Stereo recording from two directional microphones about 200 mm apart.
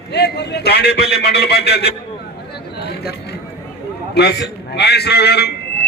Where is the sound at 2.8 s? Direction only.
55° left (ahead or behind).